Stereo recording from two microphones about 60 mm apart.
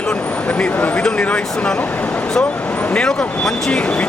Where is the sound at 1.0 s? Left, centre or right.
Centre.